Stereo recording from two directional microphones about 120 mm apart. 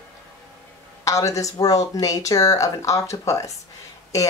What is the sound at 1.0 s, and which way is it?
Speech, 25° left (ahead or behind).